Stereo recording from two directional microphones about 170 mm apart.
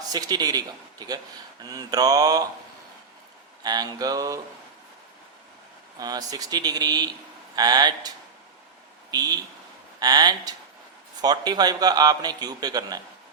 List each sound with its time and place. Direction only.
0.1 s a man's voice: 25° right (ahead or behind)
3.6 s a man's voice: 25° right (ahead or behind)
6.0 s a man's voice: 20° right (ahead or behind)